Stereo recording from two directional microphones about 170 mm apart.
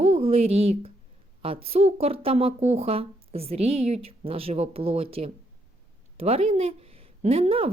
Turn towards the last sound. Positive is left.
turn(degrees=-35)  # may be behind; listen again after turning